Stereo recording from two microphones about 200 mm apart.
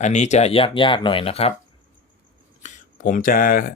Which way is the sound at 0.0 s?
35° left (ahead or behind).